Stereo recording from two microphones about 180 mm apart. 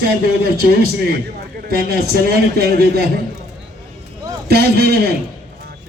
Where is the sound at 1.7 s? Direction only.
60° right (ahead or behind).